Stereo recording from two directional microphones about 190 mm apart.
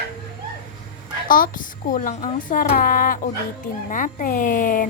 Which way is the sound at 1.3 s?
45° left (ahead or behind).